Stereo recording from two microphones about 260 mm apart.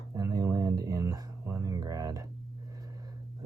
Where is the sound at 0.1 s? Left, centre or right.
Centre.